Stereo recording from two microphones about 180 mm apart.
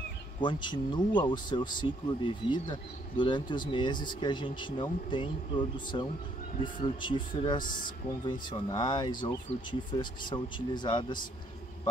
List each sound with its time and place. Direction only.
0.4 s speech: 25° left (ahead or behind)